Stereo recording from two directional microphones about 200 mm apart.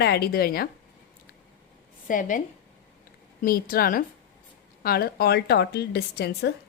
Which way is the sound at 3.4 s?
45° left (ahead or behind).